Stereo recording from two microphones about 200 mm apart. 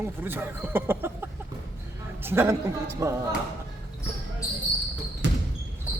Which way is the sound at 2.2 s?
10° right (ahead or behind).